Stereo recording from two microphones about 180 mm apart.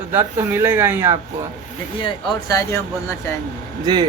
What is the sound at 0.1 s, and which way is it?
Speech, 10° right (ahead or behind).